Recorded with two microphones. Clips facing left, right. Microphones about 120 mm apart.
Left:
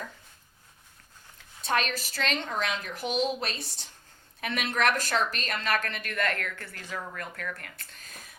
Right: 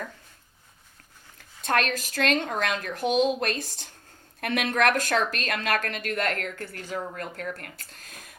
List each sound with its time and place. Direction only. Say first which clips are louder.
1.6 s a woman's voice: right 3 dB; 55° right (ahead or behind)
3.2 s speech: right 5 dB; 20° right (ahead or behind)
3.4 s a woman's voice: right 6 dB; 55° right (ahead or behind)
5.7 s a woman's voice: right 3 dB; 45° right (ahead or behind)